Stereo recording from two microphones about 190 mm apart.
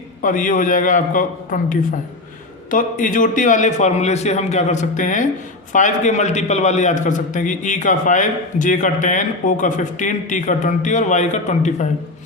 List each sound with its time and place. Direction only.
0.2 s a man's voice: 45° left (ahead or behind)